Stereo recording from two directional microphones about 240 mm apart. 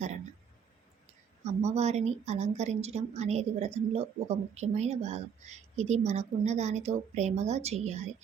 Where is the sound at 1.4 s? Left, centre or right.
Right.